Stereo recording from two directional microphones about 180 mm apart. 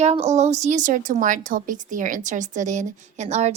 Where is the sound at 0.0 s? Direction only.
35° right (ahead or behind).